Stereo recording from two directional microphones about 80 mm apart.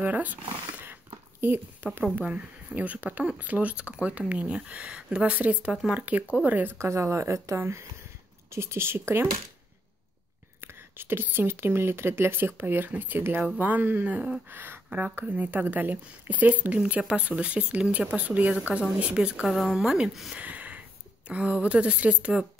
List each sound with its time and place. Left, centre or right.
0.0 s a sound: right
1.4 s speech: right
6.9 s speech: right
10.6 s speech: right; by 19.4 s centre
19.4 s a woman's voice: centre
20.4 s a sound: centre
21.3 s speech: centre